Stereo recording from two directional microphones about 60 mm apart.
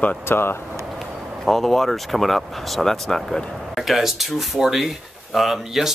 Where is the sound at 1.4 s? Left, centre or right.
Centre.